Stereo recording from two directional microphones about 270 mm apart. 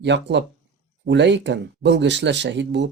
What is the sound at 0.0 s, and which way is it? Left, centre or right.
Speech, right.